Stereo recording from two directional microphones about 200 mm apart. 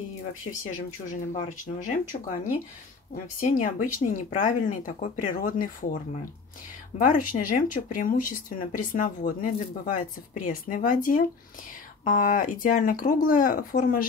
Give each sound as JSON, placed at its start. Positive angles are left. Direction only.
{"t": 1.3, "sound": "speech", "side_deg": 40}
{"t": 7.0, "sound": "speech", "side_deg": 40}